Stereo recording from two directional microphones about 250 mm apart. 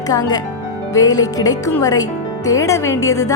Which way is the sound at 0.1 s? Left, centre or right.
Centre.